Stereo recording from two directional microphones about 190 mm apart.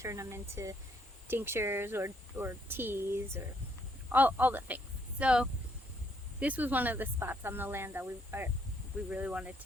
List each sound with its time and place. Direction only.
0.0 s speech: 15° right (ahead or behind)